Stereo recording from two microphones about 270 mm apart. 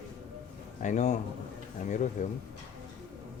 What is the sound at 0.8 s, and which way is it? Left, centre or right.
Speech, left.